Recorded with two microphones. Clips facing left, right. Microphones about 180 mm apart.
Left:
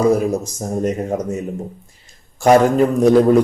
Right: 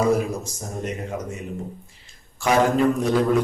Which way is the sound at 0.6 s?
45° left (ahead or behind).